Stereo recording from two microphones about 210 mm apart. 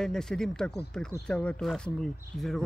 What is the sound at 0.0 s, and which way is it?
Speech, centre (ahead or behind).